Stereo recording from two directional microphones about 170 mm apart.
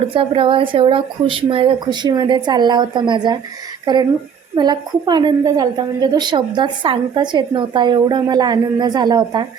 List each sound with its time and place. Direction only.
0.1 s a woman's voice: 30° right (ahead or behind)
4.5 s a woman's voice: 25° right (ahead or behind)